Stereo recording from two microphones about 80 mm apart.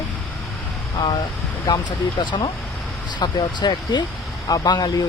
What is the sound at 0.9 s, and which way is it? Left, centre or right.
Speech, left.